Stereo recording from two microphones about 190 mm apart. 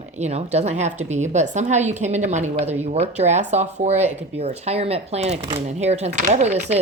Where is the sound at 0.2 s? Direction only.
35° right (ahead or behind).